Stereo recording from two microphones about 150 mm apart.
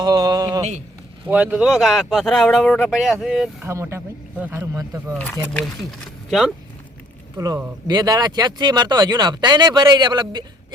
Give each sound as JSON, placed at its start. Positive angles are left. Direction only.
{"t": 0.0, "sound": "speech", "side_deg": -25}
{"t": 1.3, "sound": "speech", "side_deg": -10}
{"t": 3.6, "sound": "speech", "side_deg": -20}
{"t": 5.1, "sound": "speech", "side_deg": 10}
{"t": 7.3, "sound": "speech", "side_deg": -20}